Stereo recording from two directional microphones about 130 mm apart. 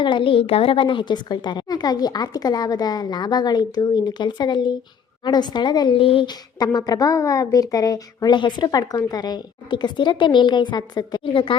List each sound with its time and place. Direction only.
0.0 s a woman's voice: 40° left (ahead or behind)